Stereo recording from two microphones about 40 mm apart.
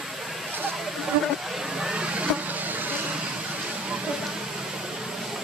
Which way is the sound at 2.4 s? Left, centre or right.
Right.